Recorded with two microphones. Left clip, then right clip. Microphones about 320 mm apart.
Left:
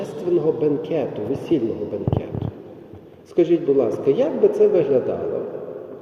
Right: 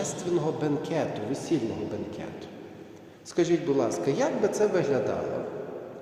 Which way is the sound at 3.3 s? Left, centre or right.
Centre.